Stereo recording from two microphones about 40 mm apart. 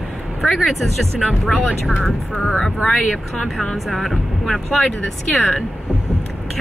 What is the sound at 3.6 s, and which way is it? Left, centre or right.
Speech, centre.